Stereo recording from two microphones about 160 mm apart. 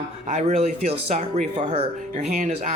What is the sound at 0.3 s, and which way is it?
Speech, 45° right (ahead or behind).